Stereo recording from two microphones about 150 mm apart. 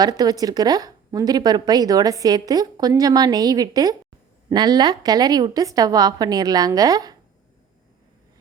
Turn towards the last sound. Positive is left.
turn(degrees=-25)  # may be behind; listen again after turning